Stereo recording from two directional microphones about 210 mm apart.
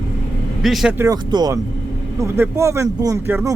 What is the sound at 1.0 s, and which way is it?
Speech, 20° right (ahead or behind).